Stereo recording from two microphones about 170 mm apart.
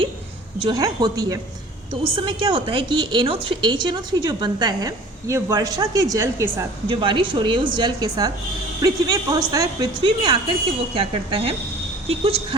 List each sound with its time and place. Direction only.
0.6 s a woman's voice: 25° right (ahead or behind)
6.8 s a woman's voice: 30° right (ahead or behind)